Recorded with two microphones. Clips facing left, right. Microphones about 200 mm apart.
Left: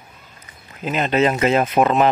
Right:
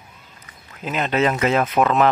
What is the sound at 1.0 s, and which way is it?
Speech, 30° left (ahead or behind).